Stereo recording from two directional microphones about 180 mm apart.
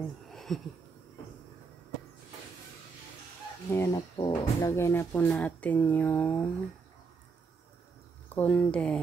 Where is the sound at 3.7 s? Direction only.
15° left (ahead or behind).